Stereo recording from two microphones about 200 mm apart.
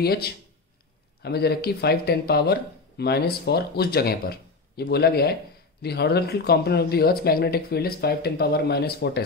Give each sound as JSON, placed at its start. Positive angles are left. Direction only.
{"t": 0.0, "sound": "speech", "side_deg": 50}